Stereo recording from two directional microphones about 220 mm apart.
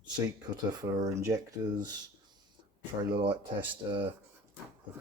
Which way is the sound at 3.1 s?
20° right (ahead or behind).